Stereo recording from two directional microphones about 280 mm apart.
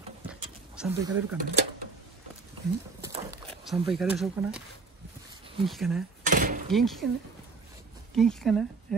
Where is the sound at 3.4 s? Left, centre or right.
Centre.